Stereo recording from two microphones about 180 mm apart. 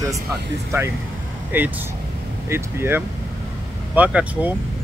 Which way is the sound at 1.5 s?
10° right (ahead or behind).